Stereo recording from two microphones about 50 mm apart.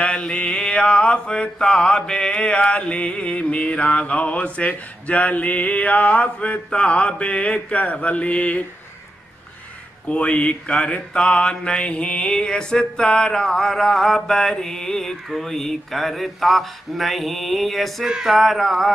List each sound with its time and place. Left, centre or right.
0.0 s mantra: centre
10.0 s mantra: left; by 15.1 s centre
15.2 s speech: centre
18.0 s speech: centre